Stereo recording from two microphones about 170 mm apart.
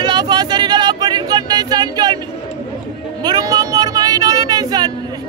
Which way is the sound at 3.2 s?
25° right (ahead or behind).